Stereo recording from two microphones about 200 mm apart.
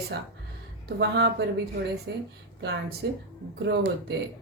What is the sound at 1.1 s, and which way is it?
A woman's voice, 55° right (ahead or behind).